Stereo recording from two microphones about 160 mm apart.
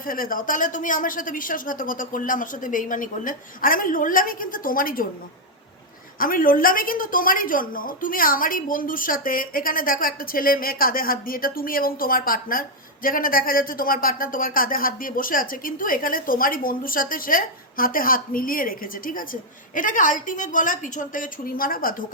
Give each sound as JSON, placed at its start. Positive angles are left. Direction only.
{"t": 0.0, "sound": "a woman's voice", "side_deg": 60}
{"t": 6.1, "sound": "a woman's voice", "side_deg": 60}